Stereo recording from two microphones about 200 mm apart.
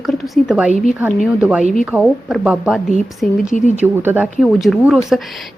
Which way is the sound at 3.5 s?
40° left (ahead or behind).